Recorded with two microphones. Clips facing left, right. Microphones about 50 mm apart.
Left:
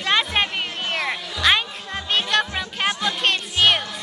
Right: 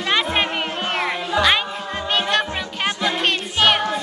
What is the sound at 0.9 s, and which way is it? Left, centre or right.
Music, centre.